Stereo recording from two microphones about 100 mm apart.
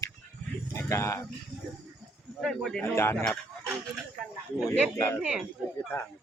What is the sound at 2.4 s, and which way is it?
Speech, centre (ahead or behind).